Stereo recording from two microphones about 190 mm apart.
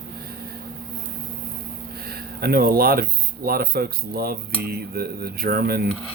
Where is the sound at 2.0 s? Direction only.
55° right (ahead or behind).